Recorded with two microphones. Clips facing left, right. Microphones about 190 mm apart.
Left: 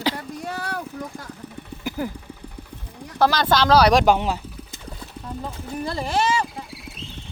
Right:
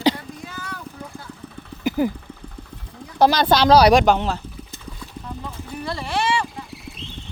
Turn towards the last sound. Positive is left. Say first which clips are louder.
# left 1 dB
turn(degrees=40)  # may be behind; listen again after turning